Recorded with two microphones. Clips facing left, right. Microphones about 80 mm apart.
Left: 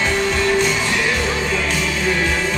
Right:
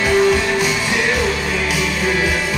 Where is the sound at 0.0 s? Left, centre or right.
Centre.